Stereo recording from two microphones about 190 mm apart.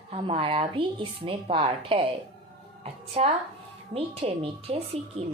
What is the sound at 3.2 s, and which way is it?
Speech, 35° right (ahead or behind).